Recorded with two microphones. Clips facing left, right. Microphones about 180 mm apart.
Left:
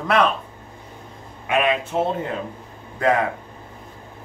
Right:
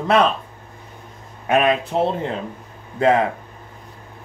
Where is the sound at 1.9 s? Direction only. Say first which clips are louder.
Right 2 dB; 30° right (ahead or behind).